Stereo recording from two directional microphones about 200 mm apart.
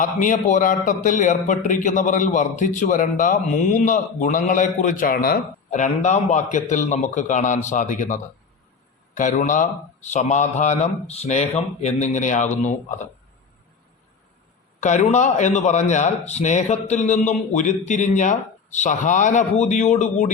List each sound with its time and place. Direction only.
0.0 s a man's voice: 40° left (ahead or behind)
14.8 s a man's voice: 35° left (ahead or behind)